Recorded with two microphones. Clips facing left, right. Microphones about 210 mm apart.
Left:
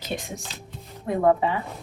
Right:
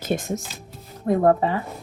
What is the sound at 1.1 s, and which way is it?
Speech, 40° right (ahead or behind).